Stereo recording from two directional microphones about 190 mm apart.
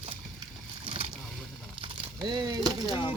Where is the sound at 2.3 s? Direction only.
25° right (ahead or behind).